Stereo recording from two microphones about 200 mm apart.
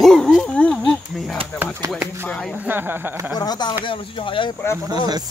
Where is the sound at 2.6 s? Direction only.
10° right (ahead or behind).